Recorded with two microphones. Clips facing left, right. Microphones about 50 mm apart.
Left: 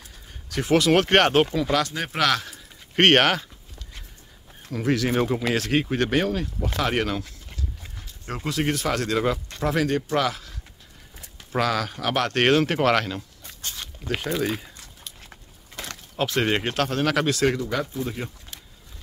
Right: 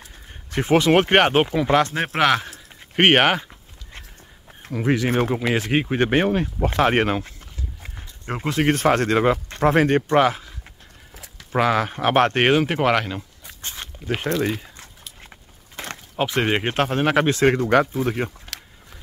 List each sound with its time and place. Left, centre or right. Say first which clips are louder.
0.0 s speech: right 3 dB; right
4.7 s speech: right 2 dB; right
11.5 s speech: right 4 dB; right
12.4 s speech: right 1 dB; centre
13.6 s a sound: right 1 dB; right
15.8 s a sound: right 3 dB; right
16.2 s speech: right 2 dB; right
17.6 s speech: right 9 dB; right
18.5 s a sound: right 7 dB; right